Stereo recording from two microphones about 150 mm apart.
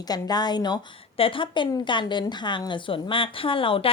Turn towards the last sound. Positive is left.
turn(degrees=35)  # may be behind; listen again after turning